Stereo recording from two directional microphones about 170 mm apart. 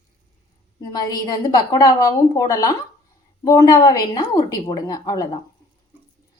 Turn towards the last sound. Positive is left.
turn(degrees=20)  # may be behind; listen again after turning